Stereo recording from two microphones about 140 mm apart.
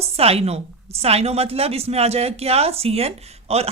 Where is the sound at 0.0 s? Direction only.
45° right (ahead or behind).